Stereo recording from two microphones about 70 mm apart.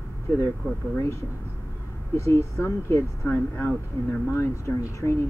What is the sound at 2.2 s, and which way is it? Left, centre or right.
Speech, left.